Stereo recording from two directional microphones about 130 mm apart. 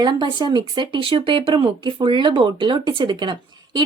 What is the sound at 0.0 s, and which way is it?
A woman's voice, 35° right (ahead or behind).